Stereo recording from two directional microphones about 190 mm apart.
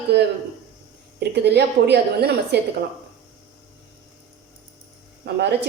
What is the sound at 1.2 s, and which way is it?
A woman's voice, 60° right (ahead or behind).